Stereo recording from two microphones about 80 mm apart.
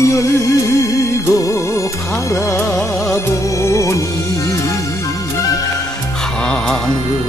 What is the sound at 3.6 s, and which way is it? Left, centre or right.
Music, left.